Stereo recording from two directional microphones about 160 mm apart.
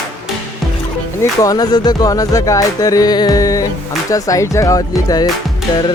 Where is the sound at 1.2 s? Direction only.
20° left (ahead or behind).